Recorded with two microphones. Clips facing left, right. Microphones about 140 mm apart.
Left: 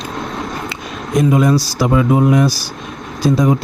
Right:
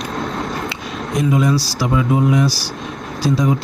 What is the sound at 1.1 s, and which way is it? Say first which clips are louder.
Speech: left 4 dB; 50° left (ahead or behind).